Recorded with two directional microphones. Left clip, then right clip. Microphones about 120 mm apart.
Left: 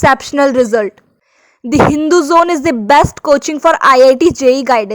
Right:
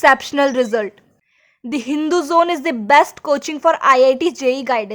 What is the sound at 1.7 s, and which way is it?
A woman's voice, 40° left (ahead or behind).